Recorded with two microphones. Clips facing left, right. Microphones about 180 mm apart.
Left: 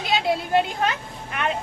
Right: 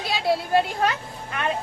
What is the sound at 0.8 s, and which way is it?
Speech, 20° left (ahead or behind).